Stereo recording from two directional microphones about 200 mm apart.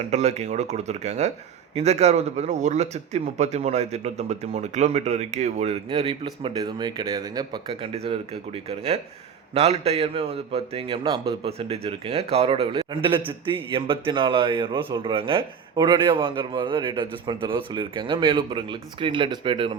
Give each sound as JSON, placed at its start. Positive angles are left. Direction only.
{"t": 0.1, "sound": "speech", "side_deg": -35}
{"t": 7.7, "sound": "a man's voice", "side_deg": -30}